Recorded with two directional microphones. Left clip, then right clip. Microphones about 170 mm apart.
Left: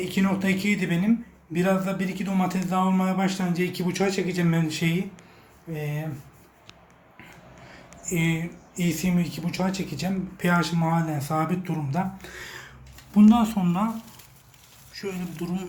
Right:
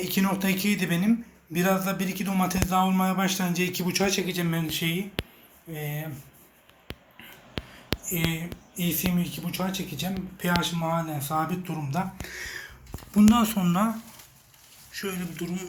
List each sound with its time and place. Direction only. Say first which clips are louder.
0.0 s a man's voice: left 1 dB; centre (ahead or behind); by 5.8 s 20° left (ahead or behind)
8.1 s speech: left 6 dB; 10° left (ahead or behind)
11.9 s a man's voice: right 1 dB; 5° left (ahead or behind)
14.9 s speech: even; 5° right (ahead or behind)
15.4 s speech: left 1 dB; 20° left (ahead or behind)